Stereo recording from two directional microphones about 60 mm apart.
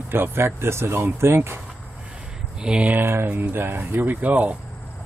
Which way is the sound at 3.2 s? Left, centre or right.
Right.